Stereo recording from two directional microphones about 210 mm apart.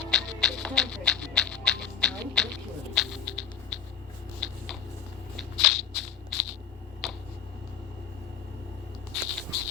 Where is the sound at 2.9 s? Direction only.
Centre (ahead or behind).